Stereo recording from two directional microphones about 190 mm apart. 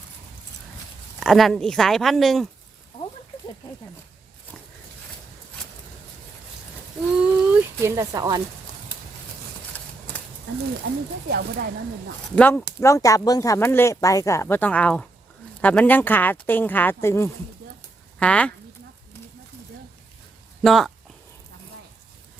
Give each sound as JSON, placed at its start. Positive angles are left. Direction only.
{"t": 1.2, "sound": "speech", "side_deg": 0}
{"t": 7.2, "sound": "a sound", "side_deg": -10}
{"t": 11.3, "sound": "speech", "side_deg": -60}
{"t": 12.4, "sound": "speech", "side_deg": 10}
{"t": 20.6, "sound": "speech", "side_deg": 0}